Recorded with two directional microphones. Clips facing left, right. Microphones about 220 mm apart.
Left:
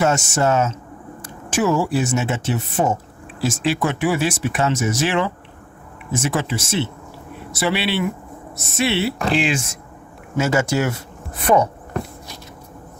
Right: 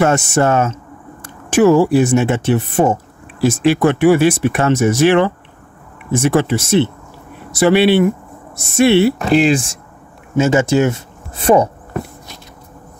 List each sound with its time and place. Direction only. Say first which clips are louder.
0.0 s speech: right 5 dB; 60° right (ahead or behind)
9.3 s speech: right 8 dB; 40° right (ahead or behind)
10.3 s speech: right 6 dB; 20° right (ahead or behind)